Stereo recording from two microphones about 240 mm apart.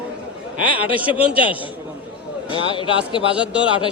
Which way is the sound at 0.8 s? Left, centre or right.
Centre.